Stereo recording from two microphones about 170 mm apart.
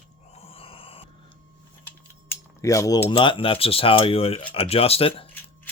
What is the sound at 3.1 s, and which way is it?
Speech, 30° left (ahead or behind).